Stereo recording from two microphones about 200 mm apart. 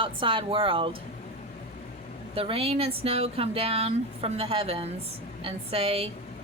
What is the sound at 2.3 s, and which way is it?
Speech, 30° right (ahead or behind).